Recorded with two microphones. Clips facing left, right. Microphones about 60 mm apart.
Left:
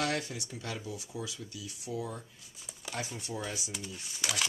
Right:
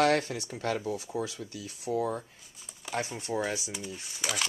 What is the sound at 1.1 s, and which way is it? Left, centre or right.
Speech, right.